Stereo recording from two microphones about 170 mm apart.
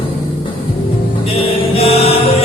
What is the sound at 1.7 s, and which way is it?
Mantra, 35° left (ahead or behind).